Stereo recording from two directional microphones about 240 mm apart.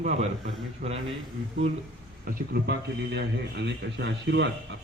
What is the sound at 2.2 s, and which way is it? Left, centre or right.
A man's voice, right.